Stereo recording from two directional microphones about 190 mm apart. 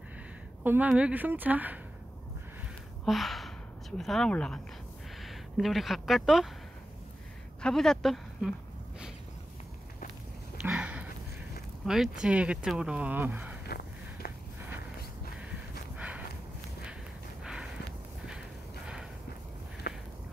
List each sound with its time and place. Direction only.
0.7 s a woman's voice: 5° right (ahead or behind)
3.1 s gasp: centre (ahead or behind)
4.0 s speech: centre (ahead or behind)
7.6 s speech: centre (ahead or behind)
10.6 s a sound: 5° right (ahead or behind)
11.8 s speech: centre (ahead or behind)
13.7 s walk: 55° left (ahead or behind)
17.4 s a sound: 5° right (ahead or behind)
19.9 s a sound: 55° left (ahead or behind)